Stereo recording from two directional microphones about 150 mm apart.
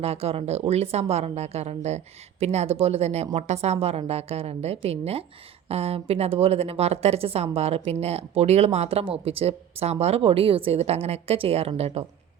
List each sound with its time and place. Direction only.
0.0 s a woman's voice: 40° right (ahead or behind)